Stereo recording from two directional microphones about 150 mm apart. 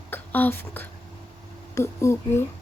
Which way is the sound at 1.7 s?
20° left (ahead or behind).